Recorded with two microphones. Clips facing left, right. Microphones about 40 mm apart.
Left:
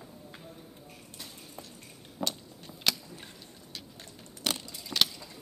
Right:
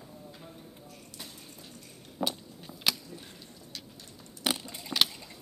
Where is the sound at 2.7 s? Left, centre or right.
Centre.